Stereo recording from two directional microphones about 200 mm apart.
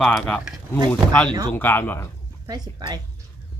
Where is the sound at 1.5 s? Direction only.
10° left (ahead or behind).